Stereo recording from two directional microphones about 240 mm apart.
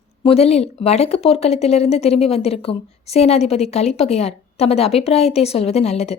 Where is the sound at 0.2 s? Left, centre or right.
Left.